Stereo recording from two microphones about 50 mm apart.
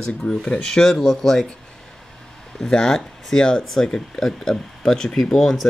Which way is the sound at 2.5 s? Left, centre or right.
Centre.